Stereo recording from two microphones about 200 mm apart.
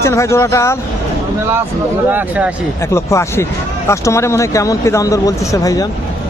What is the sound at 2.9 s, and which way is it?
Speech, 15° left (ahead or behind).